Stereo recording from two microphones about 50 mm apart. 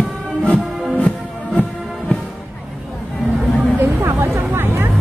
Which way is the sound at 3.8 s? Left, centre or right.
Right.